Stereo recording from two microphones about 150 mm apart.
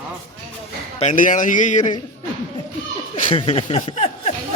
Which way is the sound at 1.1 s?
60° left (ahead or behind).